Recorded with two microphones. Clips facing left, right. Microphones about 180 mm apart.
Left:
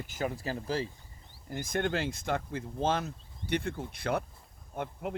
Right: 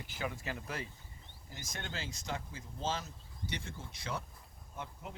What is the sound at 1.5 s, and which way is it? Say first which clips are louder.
Speech: left 14 dB; 55° left (ahead or behind).